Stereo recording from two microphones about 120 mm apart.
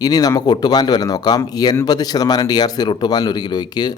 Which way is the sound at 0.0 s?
30° left (ahead or behind).